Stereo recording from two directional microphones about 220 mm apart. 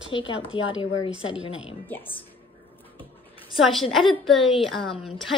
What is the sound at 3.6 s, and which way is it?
Speech, centre (ahead or behind).